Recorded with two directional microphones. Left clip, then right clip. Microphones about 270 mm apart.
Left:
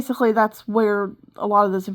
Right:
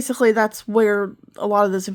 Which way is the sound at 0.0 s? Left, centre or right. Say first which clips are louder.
Right 1 dB; centre.